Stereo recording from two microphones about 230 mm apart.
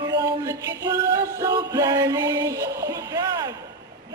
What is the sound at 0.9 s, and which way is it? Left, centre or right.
Music, centre.